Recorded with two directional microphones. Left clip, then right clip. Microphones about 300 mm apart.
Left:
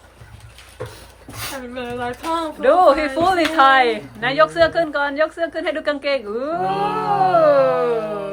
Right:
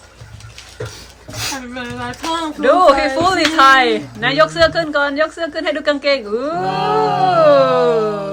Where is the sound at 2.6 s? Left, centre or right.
Centre.